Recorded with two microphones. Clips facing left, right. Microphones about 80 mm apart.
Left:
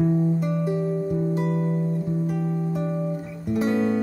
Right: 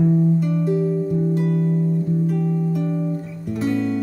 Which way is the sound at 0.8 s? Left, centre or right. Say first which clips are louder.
Right 3 dB; left.